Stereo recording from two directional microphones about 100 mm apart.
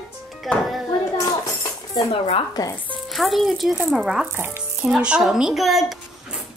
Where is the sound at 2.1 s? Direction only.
80° left.